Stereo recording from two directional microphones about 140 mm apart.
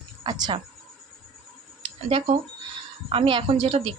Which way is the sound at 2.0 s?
45° right (ahead or behind).